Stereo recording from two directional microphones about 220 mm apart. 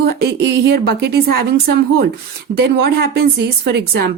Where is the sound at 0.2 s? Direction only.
50° right (ahead or behind).